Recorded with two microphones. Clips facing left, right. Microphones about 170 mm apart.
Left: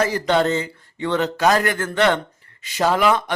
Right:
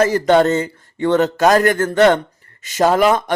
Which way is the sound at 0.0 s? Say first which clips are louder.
Right 6 dB; 45° right (ahead or behind).